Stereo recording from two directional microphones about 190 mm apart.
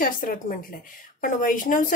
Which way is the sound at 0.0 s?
45° left (ahead or behind).